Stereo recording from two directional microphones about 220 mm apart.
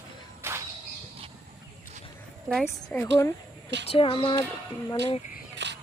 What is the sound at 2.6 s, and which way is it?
Speech, 10° left (ahead or behind).